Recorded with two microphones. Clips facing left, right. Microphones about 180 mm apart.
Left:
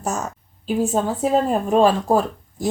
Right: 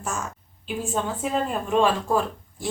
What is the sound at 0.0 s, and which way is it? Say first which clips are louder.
A woman's voice: left 6 dB; 40° left (ahead or behind).